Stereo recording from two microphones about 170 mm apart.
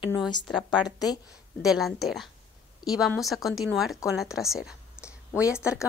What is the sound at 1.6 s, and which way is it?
Speech, centre (ahead or behind).